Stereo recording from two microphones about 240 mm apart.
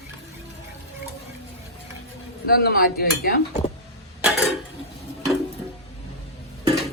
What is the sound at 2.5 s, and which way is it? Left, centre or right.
Speech, left.